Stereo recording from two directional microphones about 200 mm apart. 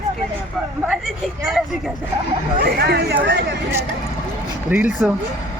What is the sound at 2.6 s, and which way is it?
Speech, 55° right (ahead or behind).